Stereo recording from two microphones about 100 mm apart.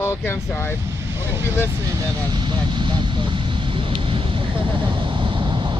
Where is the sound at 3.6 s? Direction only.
60° right (ahead or behind).